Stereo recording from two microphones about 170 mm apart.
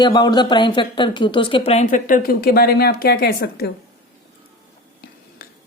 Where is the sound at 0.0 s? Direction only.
25° left (ahead or behind); by 3.7 s 65° left (ahead or behind).